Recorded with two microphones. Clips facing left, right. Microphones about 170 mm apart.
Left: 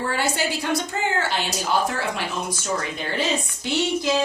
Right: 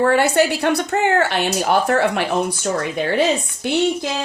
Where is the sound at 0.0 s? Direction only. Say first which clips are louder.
Right 9 dB; 65° right (ahead or behind).